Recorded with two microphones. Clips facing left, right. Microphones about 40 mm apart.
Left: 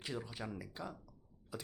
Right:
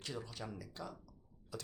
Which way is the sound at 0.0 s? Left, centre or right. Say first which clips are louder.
Left 2 dB; centre.